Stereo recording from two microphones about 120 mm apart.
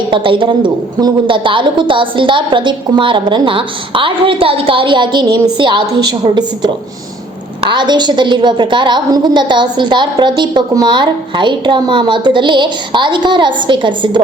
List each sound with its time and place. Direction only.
0.1 s a woman's voice: 45° right (ahead or behind)